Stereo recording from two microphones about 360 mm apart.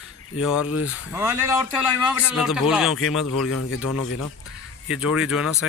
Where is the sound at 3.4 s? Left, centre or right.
Left.